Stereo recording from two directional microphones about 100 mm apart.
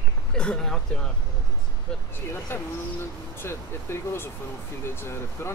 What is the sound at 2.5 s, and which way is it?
Speech, 20° left (ahead or behind).